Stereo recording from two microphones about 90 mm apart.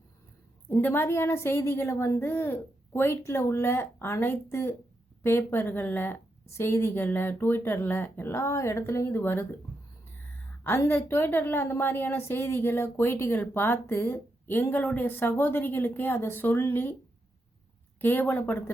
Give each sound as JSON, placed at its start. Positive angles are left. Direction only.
{"t": 0.7, "sound": "a woman's voice", "side_deg": 25}
{"t": 10.8, "sound": "a woman's voice", "side_deg": 20}
{"t": 18.0, "sound": "a woman's voice", "side_deg": 20}